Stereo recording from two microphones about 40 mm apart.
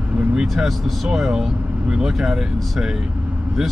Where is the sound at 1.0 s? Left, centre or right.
Centre.